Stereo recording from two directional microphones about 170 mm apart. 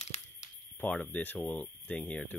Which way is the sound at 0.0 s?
40° left (ahead or behind).